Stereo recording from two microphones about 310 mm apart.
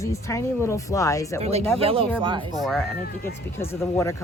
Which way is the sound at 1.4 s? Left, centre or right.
Centre.